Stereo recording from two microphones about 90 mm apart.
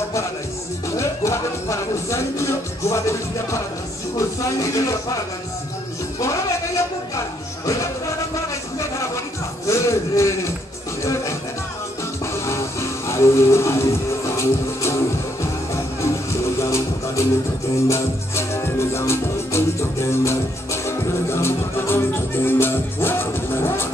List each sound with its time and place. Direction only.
0.9 s music: 35° left (ahead or behind)
4.6 s speech: 35° left (ahead or behind)
8.7 s music: 35° left (ahead or behind)
9.7 s a man's voice: 35° left (ahead or behind)
12.4 s music: 30° left (ahead or behind)
16.5 s music: 35° left (ahead or behind)